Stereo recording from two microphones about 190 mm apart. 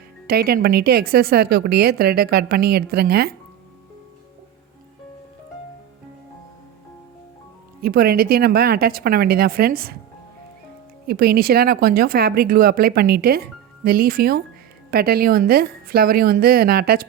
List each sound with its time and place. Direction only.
0.3 s a woman's voice: 55° right (ahead or behind)
7.8 s speech: 55° right (ahead or behind)
11.0 s speech: 55° right (ahead or behind)